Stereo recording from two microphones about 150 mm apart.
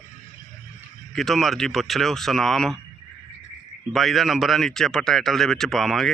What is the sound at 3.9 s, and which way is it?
Speech, centre (ahead or behind).